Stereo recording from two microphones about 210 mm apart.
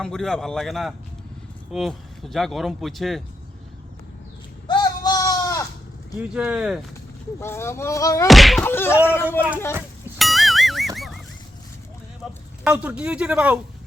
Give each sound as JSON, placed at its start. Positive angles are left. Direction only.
{"t": 0.0, "sound": "speech", "side_deg": 0}
{"t": 4.7, "sound": "goat", "side_deg": 20}
{"t": 6.1, "sound": "speech", "side_deg": -5}
{"t": 7.3, "sound": "speech", "side_deg": 10}
{"t": 8.3, "sound": "speech", "side_deg": 0}
{"t": 10.2, "sound": "music", "side_deg": 0}
{"t": 12.6, "sound": "speech", "side_deg": -5}